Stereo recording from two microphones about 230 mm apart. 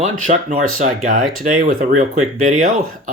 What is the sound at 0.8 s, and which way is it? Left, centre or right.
Speech, right.